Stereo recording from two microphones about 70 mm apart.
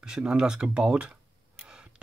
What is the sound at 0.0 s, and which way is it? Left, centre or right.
Speech, centre.